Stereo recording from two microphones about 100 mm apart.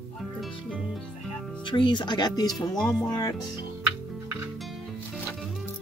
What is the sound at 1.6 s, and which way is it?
Speech, 55° left (ahead or behind).